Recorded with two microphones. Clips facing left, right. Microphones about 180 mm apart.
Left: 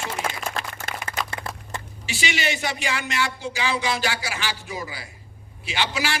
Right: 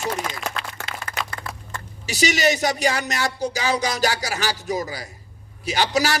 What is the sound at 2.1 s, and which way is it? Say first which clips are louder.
Speech: right 7 dB; 40° right (ahead or behind).